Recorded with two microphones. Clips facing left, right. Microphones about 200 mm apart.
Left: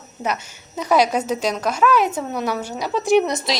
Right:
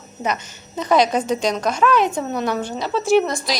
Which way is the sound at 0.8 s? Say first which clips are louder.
Right 1 dB; 10° left (ahead or behind).